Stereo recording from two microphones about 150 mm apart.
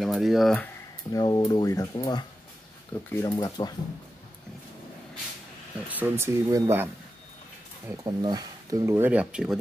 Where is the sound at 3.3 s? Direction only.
25° left (ahead or behind).